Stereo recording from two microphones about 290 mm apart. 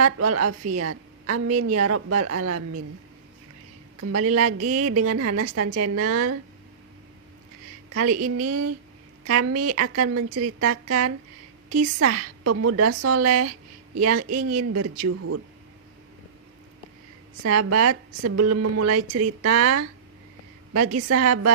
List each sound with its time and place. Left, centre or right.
0.0 s a woman's voice: right
4.0 s a woman's voice: right
7.9 s a woman's voice: right
17.4 s speech: right